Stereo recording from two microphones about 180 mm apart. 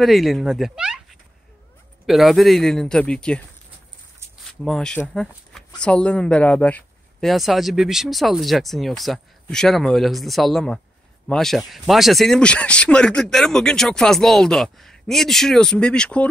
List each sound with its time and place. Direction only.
0.0 s speech: centre (ahead or behind)
2.0 s speech: centre (ahead or behind)
4.6 s speech: 5° left (ahead or behind)